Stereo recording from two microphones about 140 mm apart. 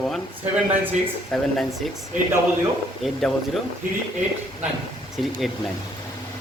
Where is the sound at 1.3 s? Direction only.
Centre (ahead or behind).